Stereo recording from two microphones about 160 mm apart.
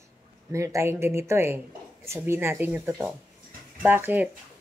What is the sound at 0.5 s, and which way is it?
Speech, 20° right (ahead or behind).